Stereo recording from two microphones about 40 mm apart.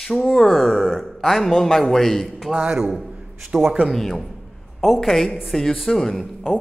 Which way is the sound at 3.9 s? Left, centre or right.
Centre.